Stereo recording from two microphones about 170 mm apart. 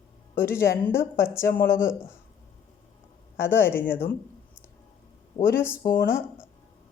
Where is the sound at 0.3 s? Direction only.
15° left (ahead or behind).